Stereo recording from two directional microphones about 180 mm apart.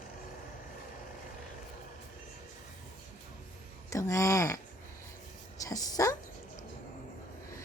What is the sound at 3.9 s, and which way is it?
A woman's voice, 20° left (ahead or behind).